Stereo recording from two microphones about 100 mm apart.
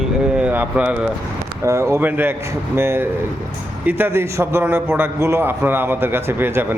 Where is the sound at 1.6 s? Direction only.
30° right (ahead or behind).